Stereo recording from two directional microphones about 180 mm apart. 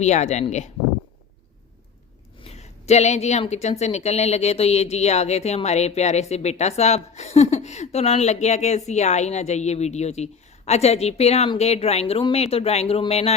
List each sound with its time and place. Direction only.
0.0 s a woman's voice: 40° left (ahead or behind)
2.4 s a woman's voice: 35° left (ahead or behind)